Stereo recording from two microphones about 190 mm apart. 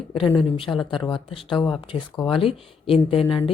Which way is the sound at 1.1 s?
25° left (ahead or behind).